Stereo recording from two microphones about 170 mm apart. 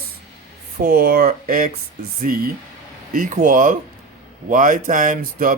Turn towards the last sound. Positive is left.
turn(degrees=-55)  # may be behind; listen again after turning